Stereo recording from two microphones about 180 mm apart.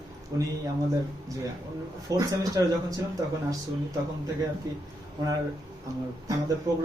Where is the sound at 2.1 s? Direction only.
20° right (ahead or behind).